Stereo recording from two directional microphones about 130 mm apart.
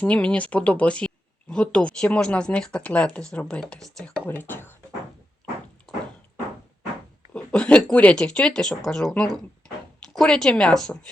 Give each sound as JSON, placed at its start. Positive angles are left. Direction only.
{"t": 0.0, "sound": "speech", "side_deg": 10}
{"t": 4.3, "sound": "speech", "side_deg": 15}
{"t": 5.4, "sound": "a sound", "side_deg": 15}
{"t": 7.3, "sound": "speech", "side_deg": 10}